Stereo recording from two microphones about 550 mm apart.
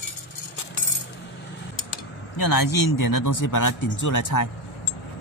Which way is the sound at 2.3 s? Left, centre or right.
Left.